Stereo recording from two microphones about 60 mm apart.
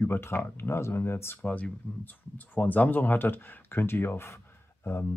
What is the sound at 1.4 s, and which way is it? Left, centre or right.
Speech, left.